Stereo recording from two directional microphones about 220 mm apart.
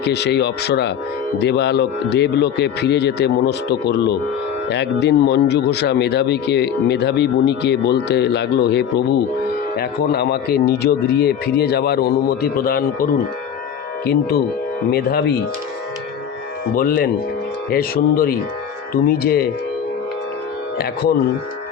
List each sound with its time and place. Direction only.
0.0 s speech: 50° left (ahead or behind)
16.7 s speech: 40° left (ahead or behind)